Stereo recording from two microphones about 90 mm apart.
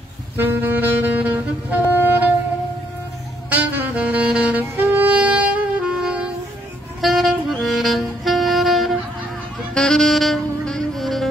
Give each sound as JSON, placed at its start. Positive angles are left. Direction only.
{"t": 0.4, "sound": "saxophone", "side_deg": -20}
{"t": 3.4, "sound": "saxophone", "side_deg": -20}